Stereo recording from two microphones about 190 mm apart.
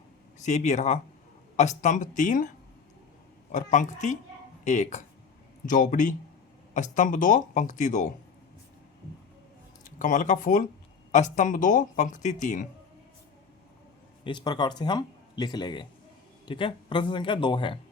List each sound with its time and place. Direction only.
0.3 s speech: 40° left (ahead or behind)
3.5 s speech: 40° left (ahead or behind)
9.8 s speech: 40° left (ahead or behind)
14.3 s speech: 25° left (ahead or behind)